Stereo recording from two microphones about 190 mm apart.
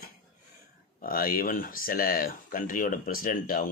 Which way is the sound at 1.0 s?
50° left (ahead or behind).